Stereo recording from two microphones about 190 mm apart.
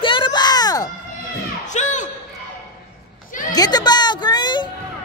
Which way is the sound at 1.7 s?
40° left (ahead or behind).